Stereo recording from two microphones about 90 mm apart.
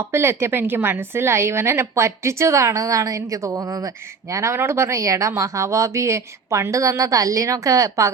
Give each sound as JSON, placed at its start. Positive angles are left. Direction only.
{"t": 0.0, "sound": "a woman's voice", "side_deg": -30}